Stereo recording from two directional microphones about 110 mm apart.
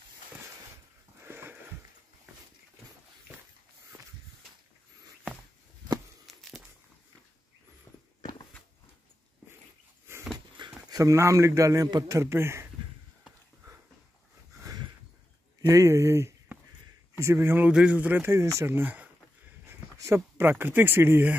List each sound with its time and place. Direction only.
1.2 s sniff: 20° right (ahead or behind)
10.1 s dog: 20° right (ahead or behind)
10.9 s a man's voice: 30° right (ahead or behind)
15.6 s a sound: 25° right (ahead or behind)
17.2 s a man's voice: 25° right (ahead or behind)